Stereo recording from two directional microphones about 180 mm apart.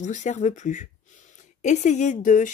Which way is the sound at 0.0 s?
40° left (ahead or behind).